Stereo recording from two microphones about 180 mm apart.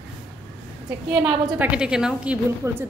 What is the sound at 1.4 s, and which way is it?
A woman's voice, 5° right (ahead or behind).